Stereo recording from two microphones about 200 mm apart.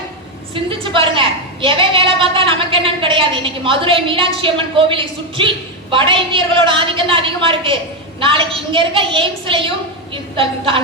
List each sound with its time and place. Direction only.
0.5 s a woman's voice: 25° right (ahead or behind)